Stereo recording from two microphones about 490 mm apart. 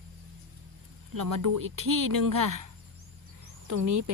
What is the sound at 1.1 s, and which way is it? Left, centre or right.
Speech, right.